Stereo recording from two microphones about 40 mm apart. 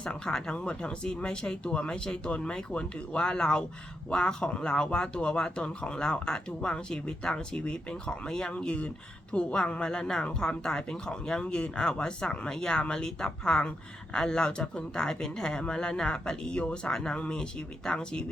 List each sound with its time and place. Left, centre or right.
0.0 s speech: left
0.5 s speech: left
16.9 s speech: centre